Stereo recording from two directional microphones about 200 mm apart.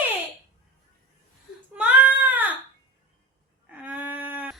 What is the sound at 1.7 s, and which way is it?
Child singing, 5° right (ahead or behind).